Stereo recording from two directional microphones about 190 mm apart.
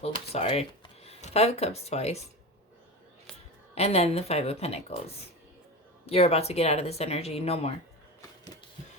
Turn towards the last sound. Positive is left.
turn(degrees=30)  # may be behind; listen again after turning